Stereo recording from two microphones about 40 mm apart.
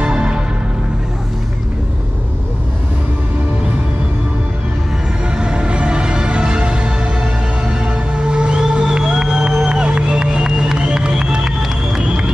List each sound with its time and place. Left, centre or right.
0.0 s music: right
5.3 s music: right
12.0 s music: right